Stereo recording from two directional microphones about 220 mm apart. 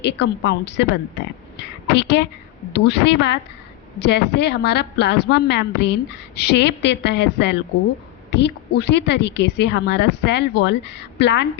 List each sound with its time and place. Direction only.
0.0 s a woman's voice: 50° left (ahead or behind)
1.5 s a sound: 50° left (ahead or behind)
2.7 s a woman's voice: 50° left (ahead or behind)